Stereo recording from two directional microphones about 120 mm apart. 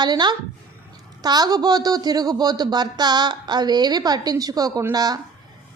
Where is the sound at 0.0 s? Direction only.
35° right (ahead or behind).